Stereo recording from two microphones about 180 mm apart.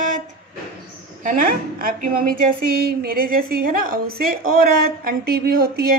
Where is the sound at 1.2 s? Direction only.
50° right (ahead or behind).